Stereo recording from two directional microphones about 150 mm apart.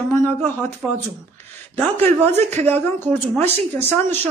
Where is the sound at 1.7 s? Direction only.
15° left (ahead or behind).